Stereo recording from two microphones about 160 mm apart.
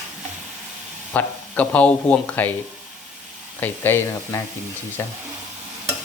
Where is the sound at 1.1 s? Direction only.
10° left (ahead or behind).